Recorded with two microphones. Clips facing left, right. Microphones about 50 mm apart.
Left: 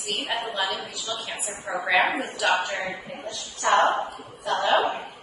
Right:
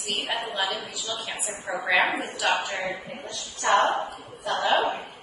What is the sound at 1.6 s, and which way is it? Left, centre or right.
Speech, left.